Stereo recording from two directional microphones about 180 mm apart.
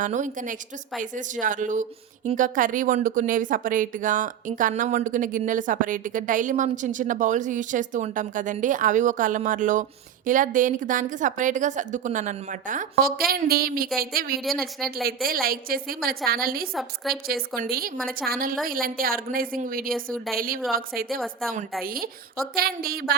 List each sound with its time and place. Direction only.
0.0 s speech: 45° right (ahead or behind)
14.4 s a woman's voice: centre (ahead or behind)
15.0 s a woman's voice: 55° right (ahead or behind)
16.7 s a woman's voice: centre (ahead or behind)
17.2 s a woman's voice: 55° right (ahead or behind)
21.4 s a woman's voice: centre (ahead or behind)
21.8 s a woman's voice: 55° right (ahead or behind)